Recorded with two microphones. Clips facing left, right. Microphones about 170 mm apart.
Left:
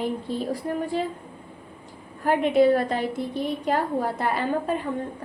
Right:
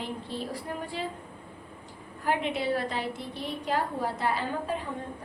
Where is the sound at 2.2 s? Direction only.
50° left (ahead or behind).